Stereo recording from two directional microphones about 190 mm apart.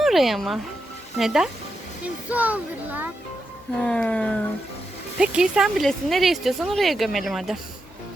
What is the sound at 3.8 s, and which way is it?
Speech, 5° left (ahead or behind).